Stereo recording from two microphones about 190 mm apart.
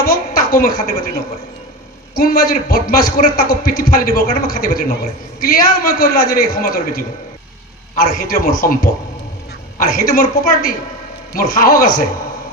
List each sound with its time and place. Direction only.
0.0 s a woman's voice: 50° left (ahead or behind)
2.1 s a man's voice: 50° left (ahead or behind)